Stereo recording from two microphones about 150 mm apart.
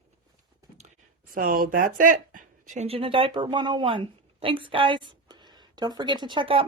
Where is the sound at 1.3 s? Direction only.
70° right (ahead or behind).